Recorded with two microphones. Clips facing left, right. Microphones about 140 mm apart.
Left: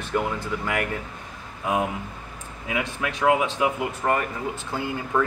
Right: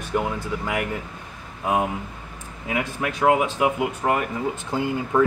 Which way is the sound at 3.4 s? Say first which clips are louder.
Right 2 dB; 10° right (ahead or behind).